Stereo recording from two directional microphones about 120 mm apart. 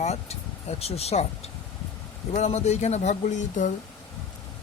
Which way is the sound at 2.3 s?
60° left (ahead or behind).